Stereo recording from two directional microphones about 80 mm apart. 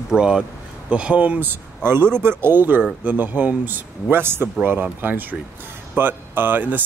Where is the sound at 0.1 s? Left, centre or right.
Centre.